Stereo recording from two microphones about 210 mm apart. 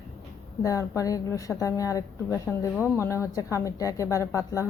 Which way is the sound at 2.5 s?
Centre (ahead or behind).